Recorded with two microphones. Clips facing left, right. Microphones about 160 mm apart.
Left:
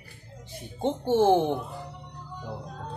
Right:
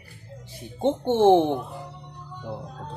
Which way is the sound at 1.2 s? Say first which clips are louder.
Right 5 dB; 20° right (ahead or behind).